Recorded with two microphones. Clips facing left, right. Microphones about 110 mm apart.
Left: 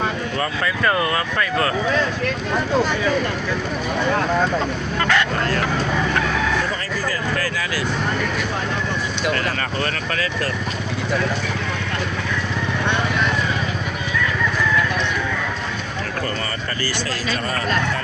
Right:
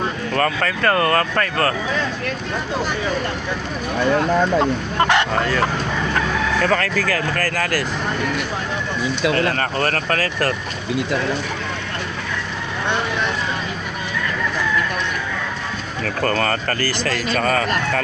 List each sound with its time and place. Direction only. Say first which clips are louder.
0.3 s speech: right 7 dB; 55° right (ahead or behind)
4.9 s speech: right 3 dB; 20° right (ahead or behind)
6.6 s speech: right 5 dB; 65° right (ahead or behind); by 7.9 s 45° right (ahead or behind)
9.3 s speech: right 4 dB; 40° right (ahead or behind)
16.2 s speech: right 6 dB; 60° right (ahead or behind)
17.4 s speech: right 2 dB; 90° right